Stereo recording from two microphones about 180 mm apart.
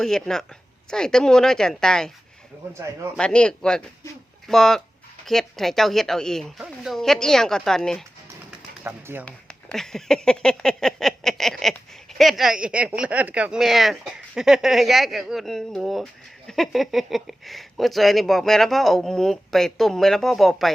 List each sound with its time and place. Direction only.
0.0 s speech: 5° left (ahead or behind)
2.7 s a man's voice: 15° right (ahead or behind)
3.2 s speech: 5° left (ahead or behind)
8.8 s speech: 10° right (ahead or behind)
9.2 s speech: 5° left (ahead or behind)